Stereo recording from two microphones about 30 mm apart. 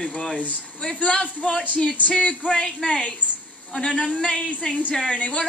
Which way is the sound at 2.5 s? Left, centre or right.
Left.